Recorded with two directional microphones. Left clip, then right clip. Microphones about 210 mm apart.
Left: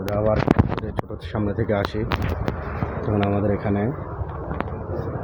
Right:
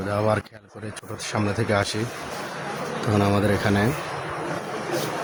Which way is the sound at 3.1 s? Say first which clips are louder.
Right 1 dB; 15° right (ahead or behind).